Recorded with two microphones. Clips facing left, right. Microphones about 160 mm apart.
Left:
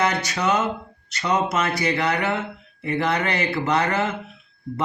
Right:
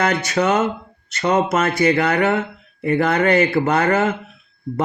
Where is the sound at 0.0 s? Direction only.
50° right (ahead or behind).